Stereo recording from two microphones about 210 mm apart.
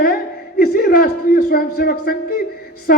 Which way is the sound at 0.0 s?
45° left (ahead or behind).